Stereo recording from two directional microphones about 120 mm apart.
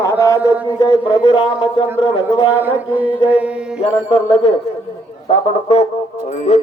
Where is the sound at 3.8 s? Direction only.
55° left (ahead or behind).